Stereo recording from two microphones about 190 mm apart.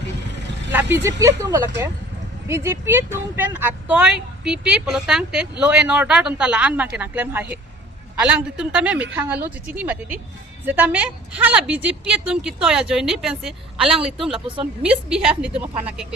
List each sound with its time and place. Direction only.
0.7 s speech: 10° right (ahead or behind)
14.3 s speech: 30° right (ahead or behind)
14.8 s speech: 5° right (ahead or behind)